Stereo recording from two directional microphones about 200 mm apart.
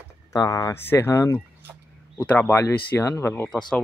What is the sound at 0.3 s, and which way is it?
Speech, 20° left (ahead or behind).